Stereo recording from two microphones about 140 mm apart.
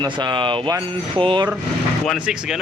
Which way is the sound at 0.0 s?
30° right (ahead or behind).